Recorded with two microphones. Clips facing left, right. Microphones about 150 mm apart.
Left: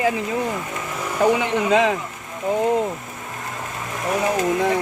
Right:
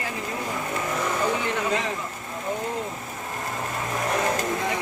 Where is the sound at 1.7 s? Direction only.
90° left.